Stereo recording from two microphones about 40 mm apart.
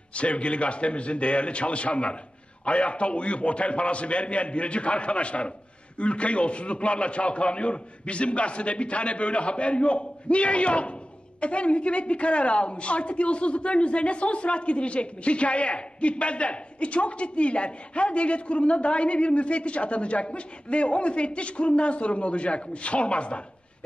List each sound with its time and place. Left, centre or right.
0.1 s a woman's voice: left